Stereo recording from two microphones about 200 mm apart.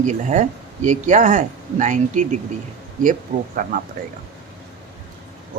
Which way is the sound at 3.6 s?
45° right (ahead or behind).